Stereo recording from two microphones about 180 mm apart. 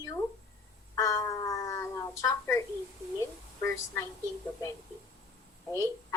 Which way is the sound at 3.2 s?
15° left (ahead or behind).